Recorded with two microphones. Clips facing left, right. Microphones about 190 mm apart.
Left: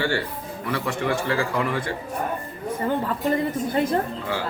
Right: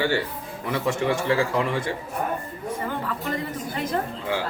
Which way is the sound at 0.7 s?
20° right (ahead or behind).